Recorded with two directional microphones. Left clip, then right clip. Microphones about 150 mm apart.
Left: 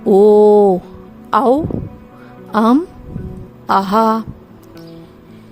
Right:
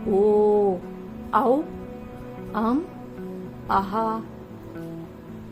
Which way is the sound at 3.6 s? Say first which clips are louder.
Left 10 dB; 90° left.